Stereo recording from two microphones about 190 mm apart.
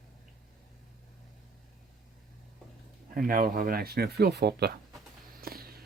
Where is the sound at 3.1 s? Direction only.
50° right (ahead or behind).